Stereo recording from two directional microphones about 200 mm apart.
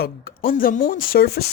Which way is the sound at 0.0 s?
45° left (ahead or behind).